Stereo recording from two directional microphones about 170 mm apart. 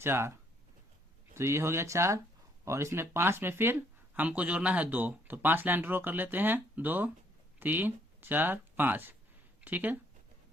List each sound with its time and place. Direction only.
0.0 s speech: 15° right (ahead or behind)